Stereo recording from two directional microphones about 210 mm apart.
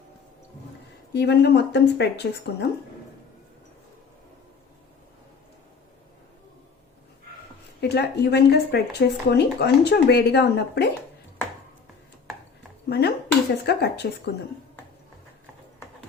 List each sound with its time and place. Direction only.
1.1 s speech: 50° left (ahead or behind)
7.8 s speech: 50° left (ahead or behind)
12.9 s speech: 50° left (ahead or behind)